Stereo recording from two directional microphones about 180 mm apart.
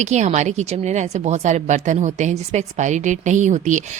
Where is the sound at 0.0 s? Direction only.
40° right (ahead or behind).